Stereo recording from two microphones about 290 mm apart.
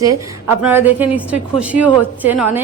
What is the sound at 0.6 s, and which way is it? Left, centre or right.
A woman's voice, centre.